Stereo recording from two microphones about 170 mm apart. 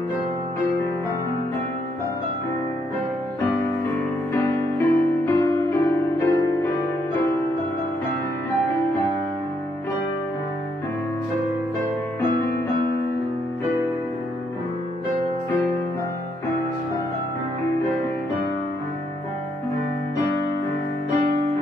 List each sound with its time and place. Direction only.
4.3 s music: 15° left (ahead or behind)